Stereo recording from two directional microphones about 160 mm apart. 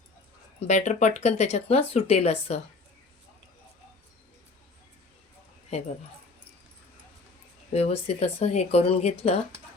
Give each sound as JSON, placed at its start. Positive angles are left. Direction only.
{"t": 0.6, "sound": "speech", "side_deg": 45}
{"t": 7.7, "sound": "speech", "side_deg": 40}